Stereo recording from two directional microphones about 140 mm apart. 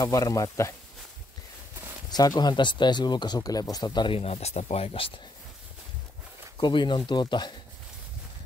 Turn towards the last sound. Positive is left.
turn(degrees=30)  # may be behind; listen again after turning